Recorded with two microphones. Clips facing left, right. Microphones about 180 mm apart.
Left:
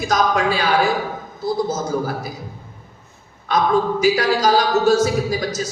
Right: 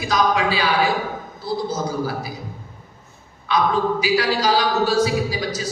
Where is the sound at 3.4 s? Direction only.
45° left (ahead or behind).